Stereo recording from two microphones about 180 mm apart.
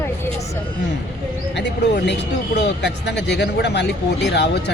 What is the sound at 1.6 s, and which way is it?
Speech, 70° left (ahead or behind).